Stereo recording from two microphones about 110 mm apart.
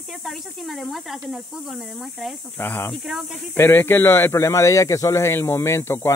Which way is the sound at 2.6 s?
20° left (ahead or behind).